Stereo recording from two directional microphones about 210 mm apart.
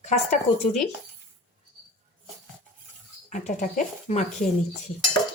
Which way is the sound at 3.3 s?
35° left (ahead or behind).